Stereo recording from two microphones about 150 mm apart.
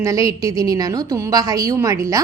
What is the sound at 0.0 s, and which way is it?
A woman's voice, 20° right (ahead or behind).